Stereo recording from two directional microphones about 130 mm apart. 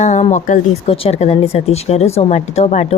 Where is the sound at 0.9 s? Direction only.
50° left (ahead or behind).